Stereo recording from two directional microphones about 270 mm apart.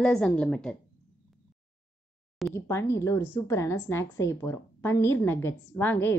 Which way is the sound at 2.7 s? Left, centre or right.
Centre.